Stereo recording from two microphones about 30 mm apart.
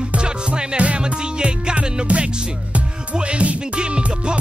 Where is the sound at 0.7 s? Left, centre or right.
Right.